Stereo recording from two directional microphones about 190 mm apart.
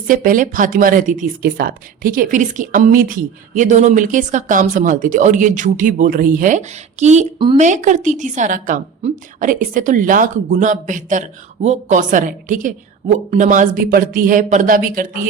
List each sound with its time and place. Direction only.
0.1 s speech: 45° right (ahead or behind)
7.3 s a woman's voice: 25° right (ahead or behind)
7.6 s a woman's voice: 40° right (ahead or behind)